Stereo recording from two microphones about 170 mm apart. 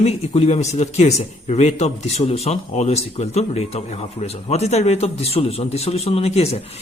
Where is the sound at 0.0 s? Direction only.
35° left (ahead or behind).